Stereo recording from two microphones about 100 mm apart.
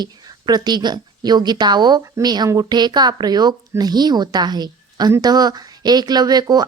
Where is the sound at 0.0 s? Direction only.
45° right (ahead or behind).